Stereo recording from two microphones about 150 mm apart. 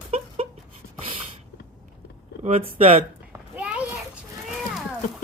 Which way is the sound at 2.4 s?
45° right (ahead or behind).